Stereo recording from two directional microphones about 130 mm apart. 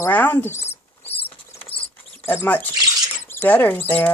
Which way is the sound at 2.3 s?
15° left (ahead or behind).